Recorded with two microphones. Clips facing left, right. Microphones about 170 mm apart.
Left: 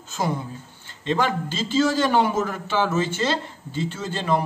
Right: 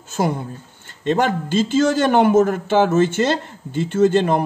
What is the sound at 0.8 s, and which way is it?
A man's voice, 50° right (ahead or behind).